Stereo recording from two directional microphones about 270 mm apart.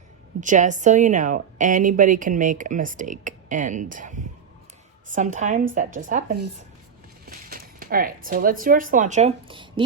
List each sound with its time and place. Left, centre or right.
0.3 s speech: right